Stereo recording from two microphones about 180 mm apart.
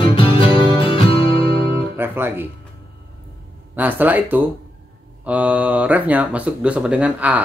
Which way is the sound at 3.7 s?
10° right (ahead or behind).